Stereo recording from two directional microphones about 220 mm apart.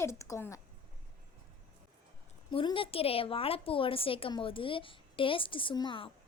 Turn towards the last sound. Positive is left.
turn(degrees=20)  # may be behind; listen again after turning